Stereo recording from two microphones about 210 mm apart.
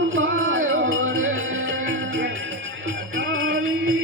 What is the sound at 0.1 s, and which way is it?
Music, 70° right (ahead or behind).